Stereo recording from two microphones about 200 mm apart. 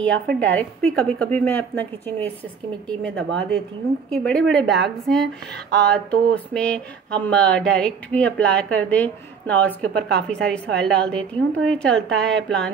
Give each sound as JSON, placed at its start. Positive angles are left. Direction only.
{"t": 0.0, "sound": "a woman's voice", "side_deg": 5}
{"t": 3.2, "sound": "speech", "side_deg": -60}
{"t": 4.1, "sound": "a woman's voice", "side_deg": 5}